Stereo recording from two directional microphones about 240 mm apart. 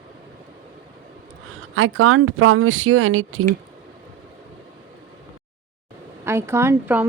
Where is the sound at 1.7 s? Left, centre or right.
Right.